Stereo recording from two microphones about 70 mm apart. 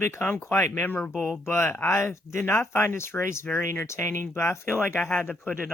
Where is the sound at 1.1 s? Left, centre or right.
Centre.